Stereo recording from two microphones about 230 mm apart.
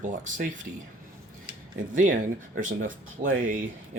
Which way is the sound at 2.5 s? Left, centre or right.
Right.